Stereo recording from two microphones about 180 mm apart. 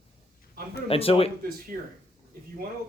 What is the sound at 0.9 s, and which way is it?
Speech, 30° left (ahead or behind).